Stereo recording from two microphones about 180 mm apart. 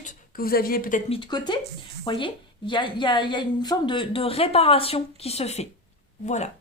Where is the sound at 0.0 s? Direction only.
45° left (ahead or behind).